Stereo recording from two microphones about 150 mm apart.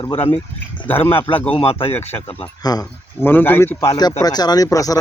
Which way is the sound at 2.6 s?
25° left (ahead or behind).